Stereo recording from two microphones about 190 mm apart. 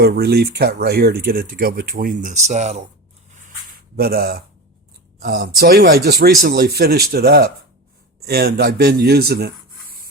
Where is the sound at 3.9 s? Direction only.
55° right (ahead or behind).